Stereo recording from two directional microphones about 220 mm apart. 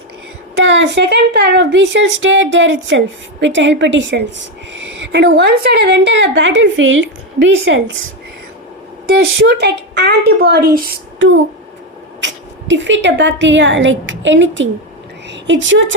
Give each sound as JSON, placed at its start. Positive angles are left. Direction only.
{"t": 0.6, "sound": "a woman's voice", "side_deg": -55}
{"t": 9.4, "sound": "a woman's voice", "side_deg": -50}
{"t": 12.2, "sound": "a woman's voice", "side_deg": -55}